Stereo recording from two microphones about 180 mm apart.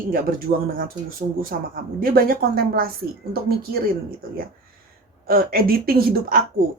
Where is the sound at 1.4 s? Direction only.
50° right (ahead or behind).